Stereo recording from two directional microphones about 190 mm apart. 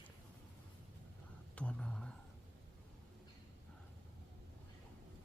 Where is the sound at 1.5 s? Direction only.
5° left (ahead or behind).